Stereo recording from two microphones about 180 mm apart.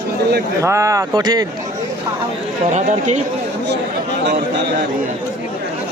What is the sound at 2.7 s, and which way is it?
Speech, 40° right (ahead or behind).